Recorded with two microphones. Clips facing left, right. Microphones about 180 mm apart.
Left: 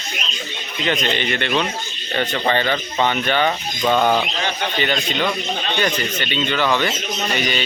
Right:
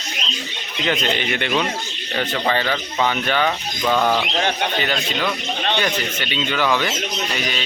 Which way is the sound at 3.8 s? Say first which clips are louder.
Left 2 dB; 20° left (ahead or behind).